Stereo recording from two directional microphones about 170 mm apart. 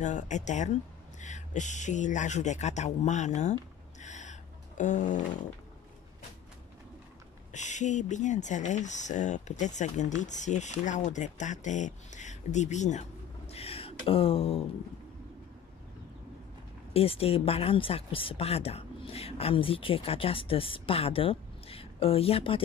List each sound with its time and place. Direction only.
0.0 s speech: 45° left (ahead or behind)
4.0 s a sound: 45° left (ahead or behind)
7.5 s speech: 45° left (ahead or behind)
16.9 s speech: 35° left (ahead or behind)